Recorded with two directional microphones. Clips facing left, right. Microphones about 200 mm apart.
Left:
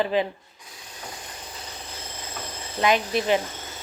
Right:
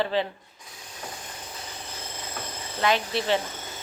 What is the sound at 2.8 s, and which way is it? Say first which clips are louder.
Speech: left 3 dB; 15° left (ahead or behind).